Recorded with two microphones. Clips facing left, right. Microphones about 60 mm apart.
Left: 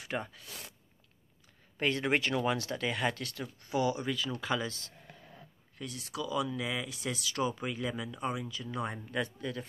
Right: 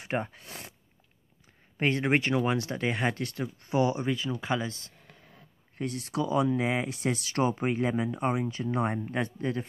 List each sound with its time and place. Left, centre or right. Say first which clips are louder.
0.0 s speech: right 5 dB; right
1.8 s speech: right 4 dB; right
5.8 s speech: right 8 dB; right